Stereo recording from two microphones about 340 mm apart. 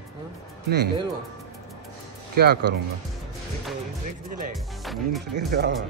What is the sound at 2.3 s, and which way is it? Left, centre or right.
Speech, right.